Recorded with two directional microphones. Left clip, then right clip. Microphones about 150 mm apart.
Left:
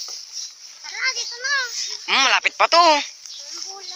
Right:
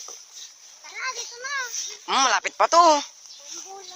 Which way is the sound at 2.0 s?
35° right (ahead or behind).